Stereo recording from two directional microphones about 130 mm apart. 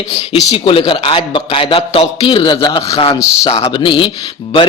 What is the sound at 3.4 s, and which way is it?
Speech, 50° left (ahead or behind).